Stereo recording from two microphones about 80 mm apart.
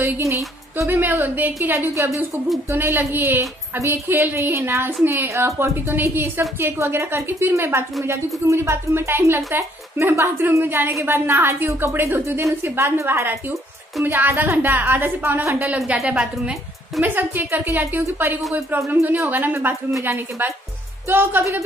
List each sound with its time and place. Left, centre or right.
0.0 s a woman's voice: right
0.8 s speech: right
2.0 s a woman's voice: right
2.7 s a woman's voice: right
16.1 s a woman's voice: centre
17.0 s a woman's voice: right